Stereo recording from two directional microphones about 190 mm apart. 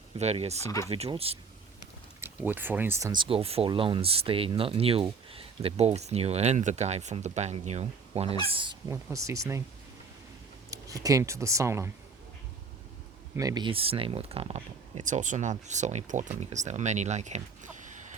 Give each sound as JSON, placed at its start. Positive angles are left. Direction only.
{"t": 0.2, "sound": "speech", "side_deg": -35}
{"t": 2.2, "sound": "speech", "side_deg": -10}
{"t": 3.1, "sound": "speech", "side_deg": -25}
{"t": 10.7, "sound": "speech", "side_deg": -20}
{"t": 13.3, "sound": "speech", "side_deg": -20}